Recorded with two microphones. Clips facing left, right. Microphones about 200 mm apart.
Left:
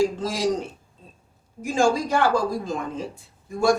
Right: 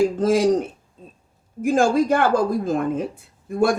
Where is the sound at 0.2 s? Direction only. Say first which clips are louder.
Right 7 dB; 55° right (ahead or behind).